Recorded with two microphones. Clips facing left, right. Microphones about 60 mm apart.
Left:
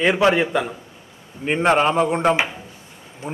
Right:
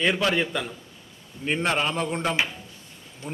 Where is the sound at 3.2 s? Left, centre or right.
Left.